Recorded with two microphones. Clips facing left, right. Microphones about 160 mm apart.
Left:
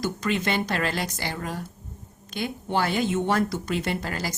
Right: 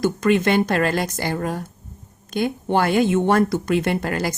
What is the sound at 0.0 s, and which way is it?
Speech, 55° right (ahead or behind).